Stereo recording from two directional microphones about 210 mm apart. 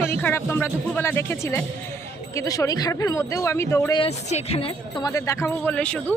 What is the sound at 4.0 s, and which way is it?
Speech, 30° left (ahead or behind).